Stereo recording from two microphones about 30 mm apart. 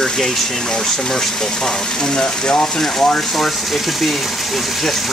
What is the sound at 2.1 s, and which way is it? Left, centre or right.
Speech, left.